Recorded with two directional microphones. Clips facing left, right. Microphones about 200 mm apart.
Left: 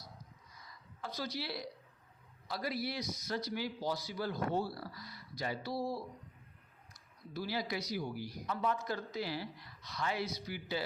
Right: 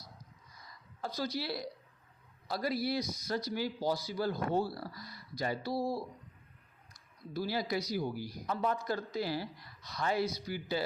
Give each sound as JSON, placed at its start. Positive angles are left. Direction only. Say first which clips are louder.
{"t": 1.0, "sound": "speech", "louder": "right 4 dB", "side_deg": -35}
{"t": 7.3, "sound": "speech", "louder": "right 4 dB", "side_deg": -40}